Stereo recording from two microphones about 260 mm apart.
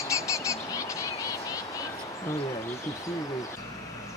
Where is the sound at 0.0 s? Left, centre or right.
Centre.